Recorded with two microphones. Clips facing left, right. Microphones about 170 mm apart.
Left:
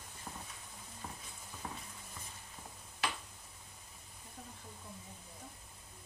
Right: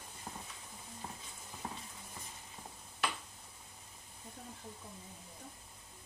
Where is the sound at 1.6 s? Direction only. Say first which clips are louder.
Right 1 dB; 25° right (ahead or behind).